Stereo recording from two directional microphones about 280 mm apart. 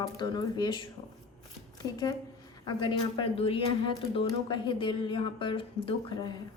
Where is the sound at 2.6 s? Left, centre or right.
Centre.